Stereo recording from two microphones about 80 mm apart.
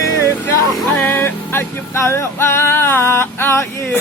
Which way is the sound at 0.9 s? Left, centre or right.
Left.